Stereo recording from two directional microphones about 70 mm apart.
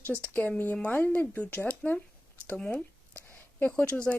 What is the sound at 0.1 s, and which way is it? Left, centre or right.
Speech, centre.